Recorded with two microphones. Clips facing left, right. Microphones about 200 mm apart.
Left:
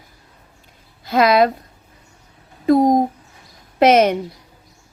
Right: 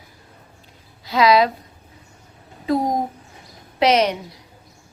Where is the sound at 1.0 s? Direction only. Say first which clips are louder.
Left 2 dB; 50° left (ahead or behind).